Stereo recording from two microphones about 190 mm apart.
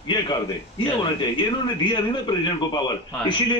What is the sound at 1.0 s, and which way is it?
A man's voice, 25° left (ahead or behind).